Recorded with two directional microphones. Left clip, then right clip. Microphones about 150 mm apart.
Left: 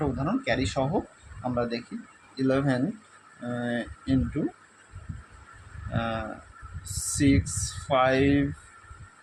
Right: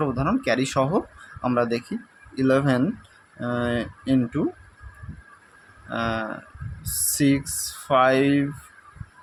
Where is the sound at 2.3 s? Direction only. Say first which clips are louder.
Right 5 dB; 40° right (ahead or behind).